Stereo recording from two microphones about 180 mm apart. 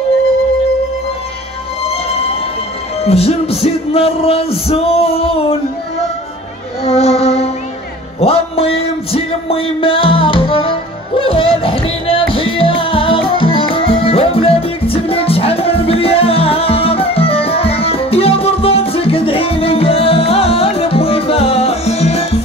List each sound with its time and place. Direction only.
3.0 s music: 35° left (ahead or behind)
6.8 s music: 35° left (ahead or behind)